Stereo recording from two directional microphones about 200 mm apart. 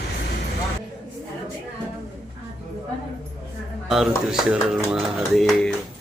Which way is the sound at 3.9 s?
Centre (ahead or behind).